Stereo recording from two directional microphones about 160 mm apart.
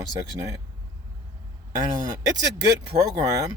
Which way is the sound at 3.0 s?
20° right (ahead or behind).